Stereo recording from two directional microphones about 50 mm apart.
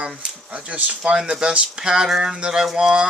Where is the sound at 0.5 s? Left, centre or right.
Right.